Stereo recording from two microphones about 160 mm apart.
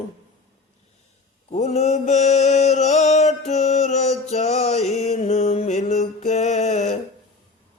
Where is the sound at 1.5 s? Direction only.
45° left (ahead or behind).